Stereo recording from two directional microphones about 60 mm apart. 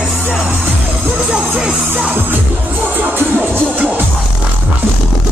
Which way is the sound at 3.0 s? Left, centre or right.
Right.